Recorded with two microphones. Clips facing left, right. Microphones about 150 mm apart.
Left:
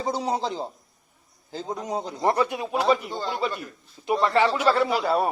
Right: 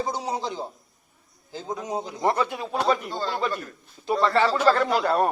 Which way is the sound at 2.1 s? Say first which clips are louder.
Left 1 dB; 20° left (ahead or behind).